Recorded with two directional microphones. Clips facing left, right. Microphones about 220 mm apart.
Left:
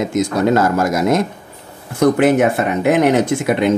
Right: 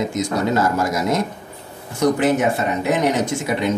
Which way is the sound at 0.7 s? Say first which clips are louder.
Left 5 dB; 50° left (ahead or behind).